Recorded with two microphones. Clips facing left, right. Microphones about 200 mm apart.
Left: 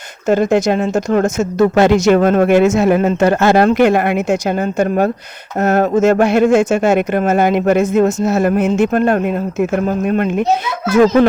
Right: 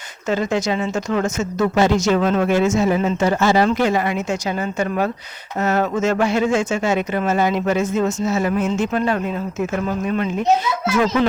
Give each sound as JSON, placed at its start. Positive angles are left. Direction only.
{"t": 0.3, "sound": "speech", "side_deg": 55}